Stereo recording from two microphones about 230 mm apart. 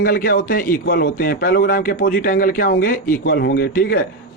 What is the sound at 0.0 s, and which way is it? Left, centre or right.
A man's voice, left.